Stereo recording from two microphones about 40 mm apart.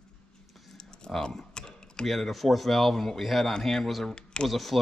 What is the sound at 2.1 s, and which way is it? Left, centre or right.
A man's voice, centre.